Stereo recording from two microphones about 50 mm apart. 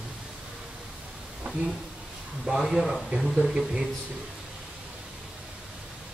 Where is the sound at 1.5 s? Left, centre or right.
Right.